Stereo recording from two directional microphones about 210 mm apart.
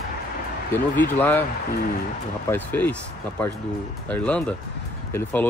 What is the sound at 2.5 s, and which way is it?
Speech, 10° left (ahead or behind).